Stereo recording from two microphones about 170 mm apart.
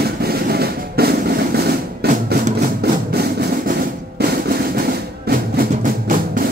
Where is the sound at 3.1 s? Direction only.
65° right (ahead or behind).